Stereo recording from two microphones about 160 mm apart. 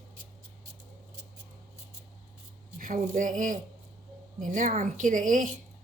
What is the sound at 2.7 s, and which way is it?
A woman's voice, 55° right (ahead or behind).